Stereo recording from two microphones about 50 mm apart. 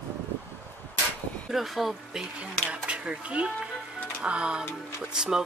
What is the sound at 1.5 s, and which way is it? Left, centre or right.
Speech, centre.